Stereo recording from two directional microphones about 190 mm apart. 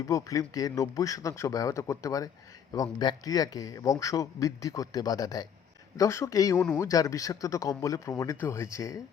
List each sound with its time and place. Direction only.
0.1 s speech: 20° left (ahead or behind)